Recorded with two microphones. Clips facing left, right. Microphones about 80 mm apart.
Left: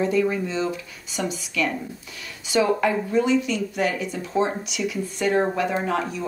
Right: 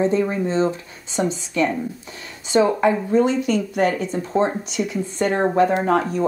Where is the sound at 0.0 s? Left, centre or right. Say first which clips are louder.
Right 2 dB; right.